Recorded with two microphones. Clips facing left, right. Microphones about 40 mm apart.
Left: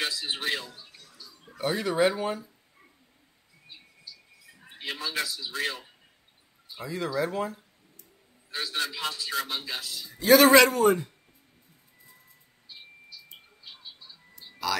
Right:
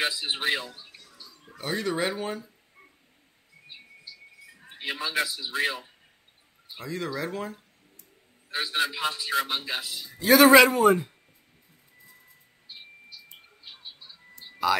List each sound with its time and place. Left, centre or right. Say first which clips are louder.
0.0 s speech: right 3 dB; right
1.6 s speech: left 3 dB; centre
3.6 s a sound: right 2 dB; right
4.6 s a man's voice: right 2 dB; centre
6.8 s speech: left 2 dB; centre
8.5 s a man's voice: right 4 dB; right
10.1 s a man's voice: right 1 dB; centre
14.4 s music: right 5 dB; right